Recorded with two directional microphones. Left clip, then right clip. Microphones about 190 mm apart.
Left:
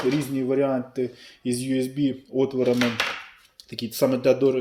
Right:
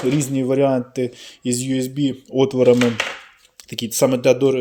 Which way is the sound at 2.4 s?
50° right (ahead or behind).